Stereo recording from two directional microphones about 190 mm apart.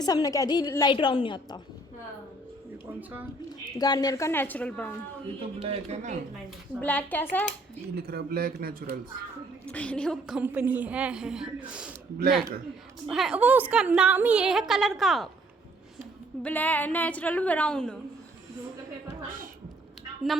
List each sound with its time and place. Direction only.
0.0 s a woman's voice: 20° left (ahead or behind)
3.8 s a woman's voice: 20° left (ahead or behind)
5.6 s speech: 35° right (ahead or behind)
6.7 s a woman's voice: 10° left (ahead or behind)
7.9 s a man's voice: 55° right (ahead or behind)
9.6 s a woman's voice: 5° left (ahead or behind)
13.1 s a woman's voice: 5° right (ahead or behind)
16.4 s a woman's voice: 10° left (ahead or behind)